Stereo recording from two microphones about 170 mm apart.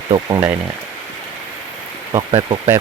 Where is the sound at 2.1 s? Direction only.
30° right (ahead or behind).